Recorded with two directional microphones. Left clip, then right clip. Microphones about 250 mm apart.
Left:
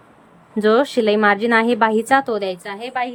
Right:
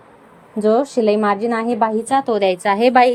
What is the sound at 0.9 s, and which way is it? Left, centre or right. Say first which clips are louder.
A woman's voice: even; centre.